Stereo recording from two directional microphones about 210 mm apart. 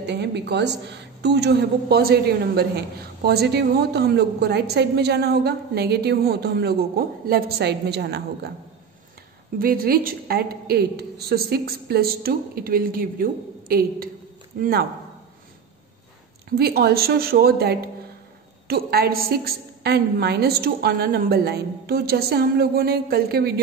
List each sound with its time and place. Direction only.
0.0 s a woman's voice: 55° right (ahead or behind)
9.6 s a woman's voice: 45° right (ahead or behind)
16.4 s a woman's voice: 45° right (ahead or behind)